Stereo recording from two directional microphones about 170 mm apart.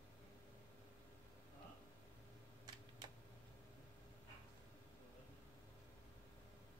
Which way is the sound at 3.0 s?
25° right (ahead or behind).